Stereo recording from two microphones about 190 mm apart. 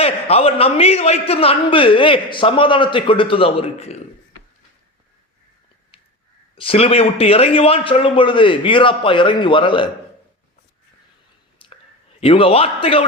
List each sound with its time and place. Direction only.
0.0 s a man's voice: 30° left (ahead or behind)
6.6 s a man's voice: 30° left (ahead or behind)
11.6 s whispering: 25° left (ahead or behind)
12.2 s a man's voice: 30° left (ahead or behind)